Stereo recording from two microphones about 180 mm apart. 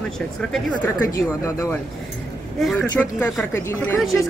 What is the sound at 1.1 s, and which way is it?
Speech, 15° left (ahead or behind).